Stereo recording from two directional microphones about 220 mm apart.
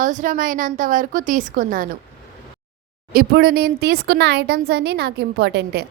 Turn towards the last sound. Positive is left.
turn(degrees=-50)  # may be behind; listen again after turning